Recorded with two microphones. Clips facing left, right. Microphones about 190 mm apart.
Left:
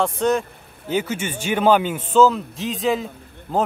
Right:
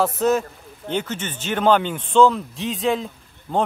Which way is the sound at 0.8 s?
10° left (ahead or behind).